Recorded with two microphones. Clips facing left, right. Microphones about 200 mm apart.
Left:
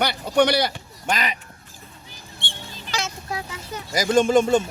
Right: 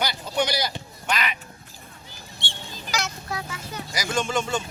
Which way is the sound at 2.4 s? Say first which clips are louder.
Even; 55° left (ahead or behind).